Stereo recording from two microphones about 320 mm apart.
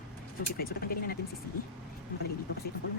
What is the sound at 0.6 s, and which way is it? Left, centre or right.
Speech, left.